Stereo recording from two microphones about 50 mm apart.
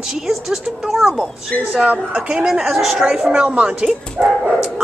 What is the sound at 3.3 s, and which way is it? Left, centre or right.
Speech, right.